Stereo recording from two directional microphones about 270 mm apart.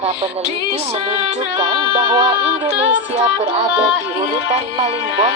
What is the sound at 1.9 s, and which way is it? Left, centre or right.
Music, centre.